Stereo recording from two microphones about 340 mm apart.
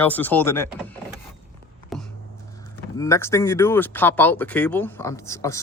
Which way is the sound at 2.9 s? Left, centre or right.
Centre.